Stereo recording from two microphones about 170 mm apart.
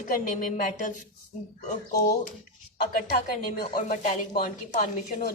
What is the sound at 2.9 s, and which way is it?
A woman's voice, 60° left (ahead or behind).